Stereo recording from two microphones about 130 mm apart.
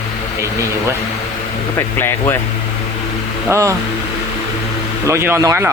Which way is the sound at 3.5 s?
25° right (ahead or behind).